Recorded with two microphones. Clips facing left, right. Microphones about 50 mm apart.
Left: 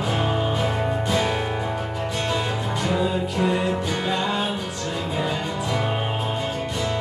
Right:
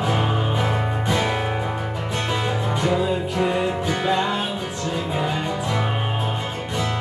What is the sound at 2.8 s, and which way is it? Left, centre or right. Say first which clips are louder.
Music: right 1 dB; centre.